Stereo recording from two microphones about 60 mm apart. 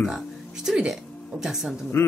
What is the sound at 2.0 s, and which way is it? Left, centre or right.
Speech, left.